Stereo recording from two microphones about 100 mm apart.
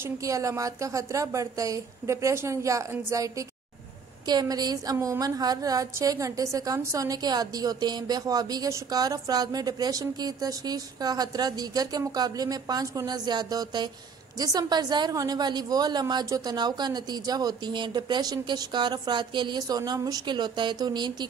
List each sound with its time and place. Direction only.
0.0 s a woman's voice: 35° right (ahead or behind)
4.3 s a woman's voice: 40° right (ahead or behind)